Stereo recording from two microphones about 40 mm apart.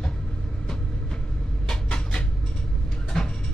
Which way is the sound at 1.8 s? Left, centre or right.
Left.